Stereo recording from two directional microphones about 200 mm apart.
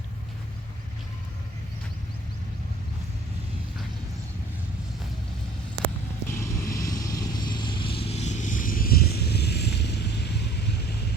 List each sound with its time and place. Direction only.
6.2 s vehicle: 15° left (ahead or behind); by 10.4 s 55° left (ahead or behind)